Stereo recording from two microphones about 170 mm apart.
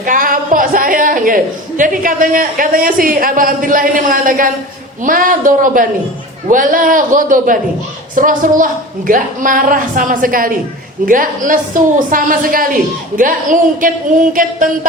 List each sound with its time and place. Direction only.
0.0 s a man's voice: 55° right (ahead or behind)